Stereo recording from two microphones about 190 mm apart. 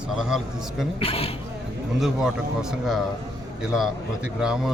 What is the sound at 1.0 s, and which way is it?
Speech, 30° left (ahead or behind).